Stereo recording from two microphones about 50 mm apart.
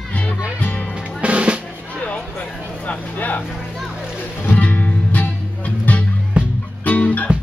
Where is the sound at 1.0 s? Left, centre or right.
Right.